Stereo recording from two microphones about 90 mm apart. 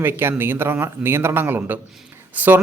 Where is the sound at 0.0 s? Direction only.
25° right (ahead or behind).